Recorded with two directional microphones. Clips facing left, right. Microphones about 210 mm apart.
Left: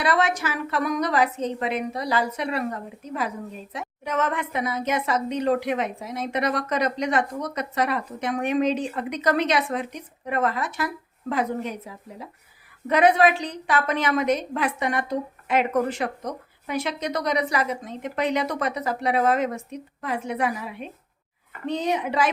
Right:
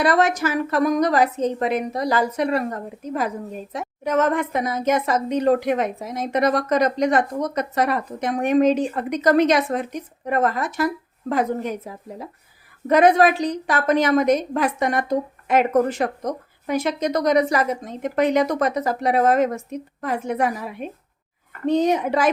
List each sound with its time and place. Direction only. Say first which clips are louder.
0.0 s a woman's voice: right 5 dB; 45° right (ahead or behind)